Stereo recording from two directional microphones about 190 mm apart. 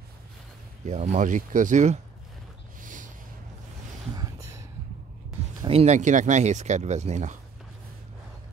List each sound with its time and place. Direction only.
0.8 s speech: 40° right (ahead or behind)
2.8 s snort: 45° right (ahead or behind)
4.1 s a sound: 20° right (ahead or behind)
5.7 s speech: 35° right (ahead or behind)